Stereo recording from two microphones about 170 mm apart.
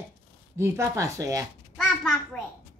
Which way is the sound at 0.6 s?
15° right (ahead or behind).